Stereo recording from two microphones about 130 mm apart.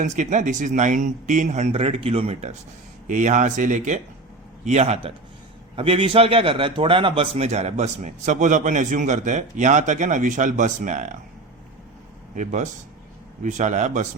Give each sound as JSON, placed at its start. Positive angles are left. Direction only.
{"t": 0.0, "sound": "a man's voice", "side_deg": -70}
{"t": 3.1, "sound": "a man's voice", "side_deg": -75}
{"t": 5.7, "sound": "a man's voice", "side_deg": -45}
{"t": 7.4, "sound": "a man's voice", "side_deg": -60}
{"t": 12.3, "sound": "a man's voice", "side_deg": -70}